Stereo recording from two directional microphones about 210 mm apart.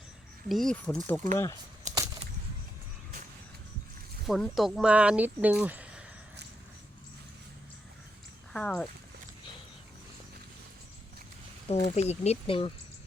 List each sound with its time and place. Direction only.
0.4 s speech: centre (ahead or behind)
1.9 s a sound: 35° right (ahead or behind)
4.3 s speech: centre (ahead or behind)
8.5 s speech: 5° left (ahead or behind)
11.7 s speech: 30° left (ahead or behind)